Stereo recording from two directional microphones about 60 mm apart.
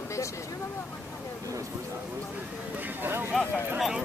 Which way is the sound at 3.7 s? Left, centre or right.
Centre.